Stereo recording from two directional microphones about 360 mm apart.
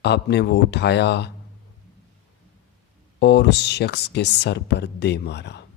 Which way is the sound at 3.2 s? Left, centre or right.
Left.